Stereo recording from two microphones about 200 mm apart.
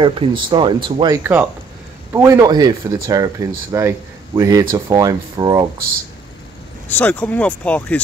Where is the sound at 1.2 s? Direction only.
10° right (ahead or behind).